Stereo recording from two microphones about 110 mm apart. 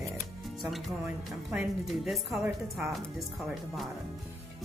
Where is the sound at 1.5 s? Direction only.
5° right (ahead or behind).